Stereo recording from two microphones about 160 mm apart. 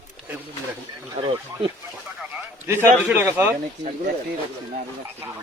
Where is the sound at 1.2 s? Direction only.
35° right (ahead or behind).